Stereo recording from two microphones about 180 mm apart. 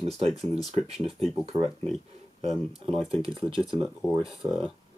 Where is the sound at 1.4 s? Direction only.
35° right (ahead or behind).